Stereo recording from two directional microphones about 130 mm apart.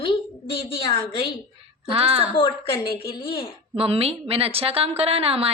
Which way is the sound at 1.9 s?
50° right (ahead or behind).